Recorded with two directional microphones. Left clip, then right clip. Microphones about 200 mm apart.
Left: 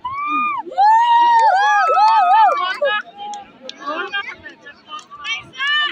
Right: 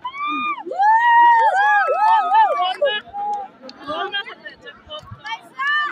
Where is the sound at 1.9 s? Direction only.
5° right (ahead or behind).